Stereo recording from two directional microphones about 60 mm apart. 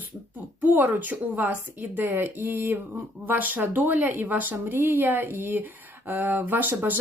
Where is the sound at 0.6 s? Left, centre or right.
Right.